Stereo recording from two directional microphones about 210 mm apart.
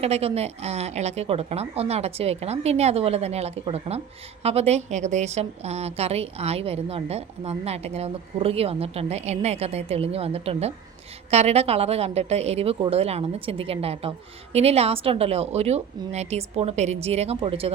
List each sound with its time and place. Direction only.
0.0 s a woman's voice: 30° right (ahead or behind)